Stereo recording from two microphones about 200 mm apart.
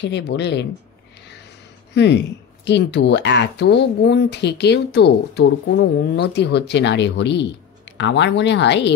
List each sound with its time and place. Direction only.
0.0 s speech: 60° left (ahead or behind)
2.0 s speech: 60° left (ahead or behind)